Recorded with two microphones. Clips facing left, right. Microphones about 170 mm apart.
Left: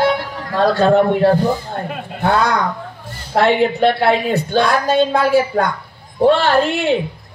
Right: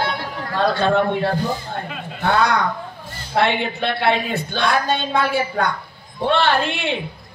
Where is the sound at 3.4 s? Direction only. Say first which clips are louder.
Left 6 dB; 40° left (ahead or behind).